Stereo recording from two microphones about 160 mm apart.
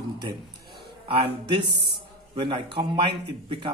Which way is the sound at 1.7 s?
90° right.